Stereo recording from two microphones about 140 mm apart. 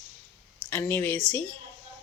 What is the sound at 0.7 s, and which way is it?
Speech, 15° left (ahead or behind).